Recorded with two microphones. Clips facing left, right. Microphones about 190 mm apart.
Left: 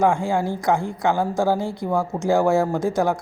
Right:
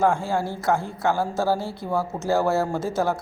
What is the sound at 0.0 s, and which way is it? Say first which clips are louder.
A man's voice: left 2 dB; 15° left (ahead or behind).